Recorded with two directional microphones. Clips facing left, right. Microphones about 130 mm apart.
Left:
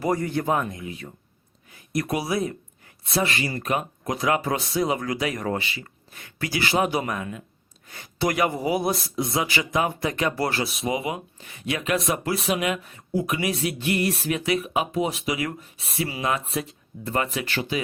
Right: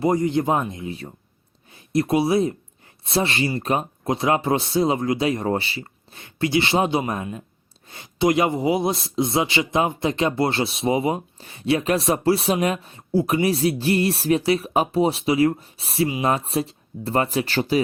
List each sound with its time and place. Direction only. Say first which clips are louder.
0.0 s speech: right 5 dB; 20° right (ahead or behind); by 17.7 s 35° right (ahead or behind)